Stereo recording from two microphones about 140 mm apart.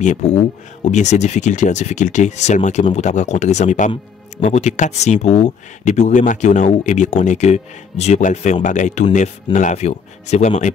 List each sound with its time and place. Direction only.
0.0 s speech: 55° left (ahead or behind)